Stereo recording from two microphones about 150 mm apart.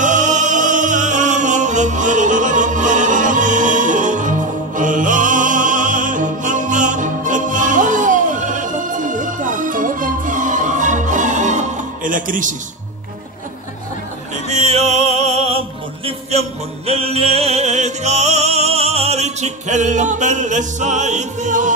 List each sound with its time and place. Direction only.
0.0 s music: 55° right (ahead or behind)
14.5 s opera: 45° right (ahead or behind)
16.3 s music: 45° right (ahead or behind)